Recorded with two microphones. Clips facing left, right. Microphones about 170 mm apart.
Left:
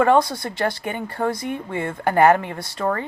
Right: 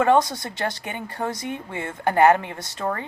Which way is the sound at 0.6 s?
50° left (ahead or behind).